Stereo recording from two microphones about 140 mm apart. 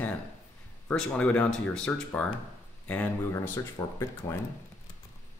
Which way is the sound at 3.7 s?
25° left (ahead or behind).